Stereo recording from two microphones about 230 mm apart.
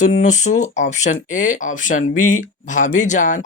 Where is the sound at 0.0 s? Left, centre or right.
Left.